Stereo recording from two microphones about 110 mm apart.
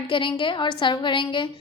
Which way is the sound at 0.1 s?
50° left (ahead or behind).